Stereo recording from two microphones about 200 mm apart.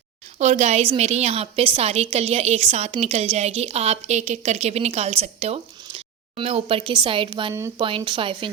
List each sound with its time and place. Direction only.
0.3 s a woman's voice: 35° right (ahead or behind)
7.5 s speech: 15° right (ahead or behind)
7.9 s speech: 25° right (ahead or behind)